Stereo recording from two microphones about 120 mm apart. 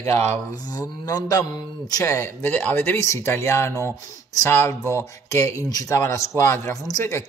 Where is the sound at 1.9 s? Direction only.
25° left (ahead or behind).